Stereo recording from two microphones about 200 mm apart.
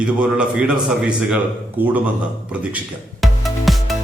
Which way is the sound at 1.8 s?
10° right (ahead or behind).